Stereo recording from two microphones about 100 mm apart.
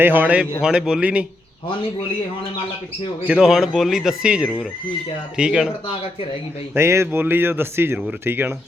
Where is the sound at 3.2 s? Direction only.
5° right (ahead or behind).